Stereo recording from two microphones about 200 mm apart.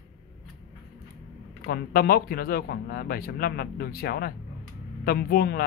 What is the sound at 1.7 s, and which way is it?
Speech, 50° left (ahead or behind).